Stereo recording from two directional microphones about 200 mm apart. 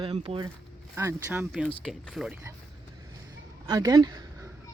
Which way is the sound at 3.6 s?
20° right (ahead or behind).